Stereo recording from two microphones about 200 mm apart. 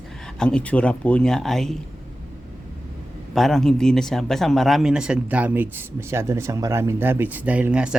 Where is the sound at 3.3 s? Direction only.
Centre (ahead or behind).